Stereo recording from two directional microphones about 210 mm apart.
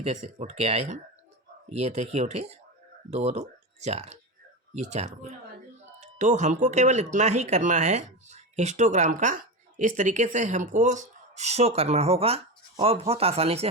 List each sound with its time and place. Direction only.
0.0 s speech: 30° right (ahead or behind)